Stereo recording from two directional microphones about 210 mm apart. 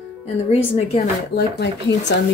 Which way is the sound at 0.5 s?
30° left (ahead or behind).